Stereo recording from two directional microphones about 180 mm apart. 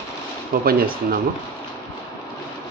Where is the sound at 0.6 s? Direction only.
55° right (ahead or behind).